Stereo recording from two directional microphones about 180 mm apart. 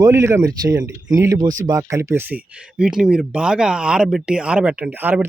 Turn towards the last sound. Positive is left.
turn(degrees=-10)  # may be behind; listen again after turning